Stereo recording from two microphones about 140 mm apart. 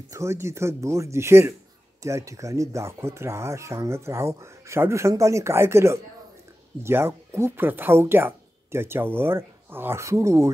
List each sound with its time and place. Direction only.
0.1 s speech: 20° right (ahead or behind)